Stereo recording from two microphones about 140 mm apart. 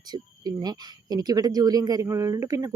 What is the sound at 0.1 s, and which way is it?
Speech, 30° right (ahead or behind).